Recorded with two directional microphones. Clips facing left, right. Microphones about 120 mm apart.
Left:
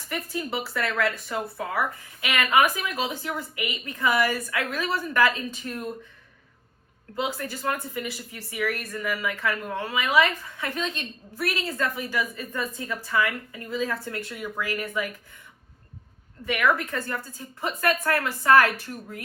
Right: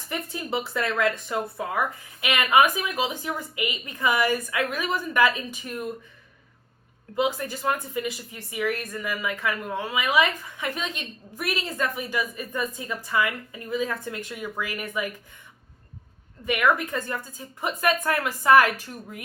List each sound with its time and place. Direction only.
0.1 s speech: 25° right (ahead or behind)
7.2 s speech: 15° right (ahead or behind)
16.5 s speech: 15° right (ahead or behind)